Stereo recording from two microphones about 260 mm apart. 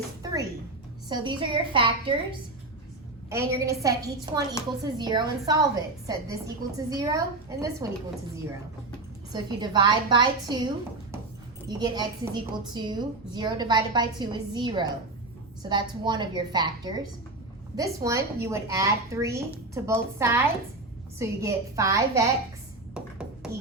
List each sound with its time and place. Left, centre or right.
1.0 s a woman's voice: centre
3.2 s a woman's voice: centre
9.3 s a woman's voice: centre
11.8 s a woman's voice: centre
23.0 s a sound: centre